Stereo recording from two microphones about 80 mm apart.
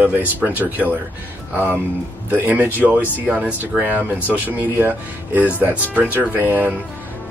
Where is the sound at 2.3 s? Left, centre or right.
Right.